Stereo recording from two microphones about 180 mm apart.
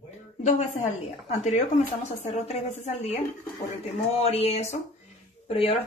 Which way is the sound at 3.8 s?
35° left (ahead or behind).